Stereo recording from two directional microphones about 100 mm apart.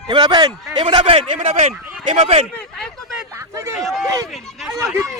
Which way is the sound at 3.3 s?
30° right (ahead or behind).